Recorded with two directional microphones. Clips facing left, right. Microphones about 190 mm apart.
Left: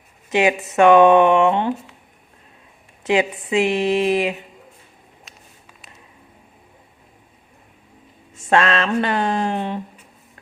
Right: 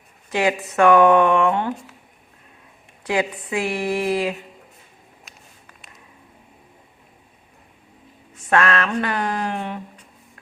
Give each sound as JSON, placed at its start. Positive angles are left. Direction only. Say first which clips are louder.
{"t": 0.3, "sound": "speech", "louder": "left 3 dB", "side_deg": 20}
{"t": 3.0, "sound": "speech", "louder": "left 4 dB", "side_deg": 20}
{"t": 5.3, "sound": "a sound", "louder": "left 1 dB", "side_deg": 0}
{"t": 8.4, "sound": "speech", "louder": "left 2 dB", "side_deg": 25}